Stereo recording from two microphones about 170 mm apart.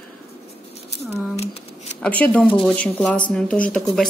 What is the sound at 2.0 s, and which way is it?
Speech, 10° left (ahead or behind).